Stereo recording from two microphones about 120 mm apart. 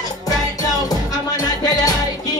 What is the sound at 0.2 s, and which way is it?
Music, 30° left (ahead or behind).